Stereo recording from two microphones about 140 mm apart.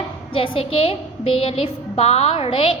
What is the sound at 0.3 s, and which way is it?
A woman's voice, 40° left (ahead or behind).